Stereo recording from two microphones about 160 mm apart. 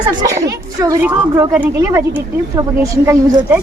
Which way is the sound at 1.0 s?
10° right (ahead or behind).